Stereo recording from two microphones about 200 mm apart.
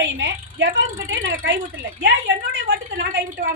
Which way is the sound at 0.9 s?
80° right.